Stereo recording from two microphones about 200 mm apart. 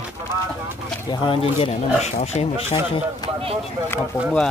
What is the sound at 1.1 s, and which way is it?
Speech, 25° left (ahead or behind).